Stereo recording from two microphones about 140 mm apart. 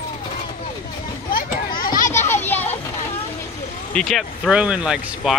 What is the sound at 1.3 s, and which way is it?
Children playing, 90° left.